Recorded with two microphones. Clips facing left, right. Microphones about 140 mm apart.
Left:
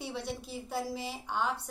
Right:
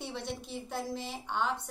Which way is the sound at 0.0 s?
5° left (ahead or behind).